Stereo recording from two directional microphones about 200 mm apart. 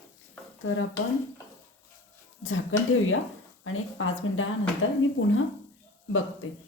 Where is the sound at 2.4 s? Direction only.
85° left.